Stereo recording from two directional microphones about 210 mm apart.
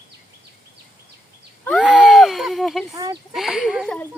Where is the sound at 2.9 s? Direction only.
15° right (ahead or behind).